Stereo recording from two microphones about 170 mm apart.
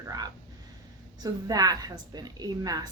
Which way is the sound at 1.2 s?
20° right (ahead or behind).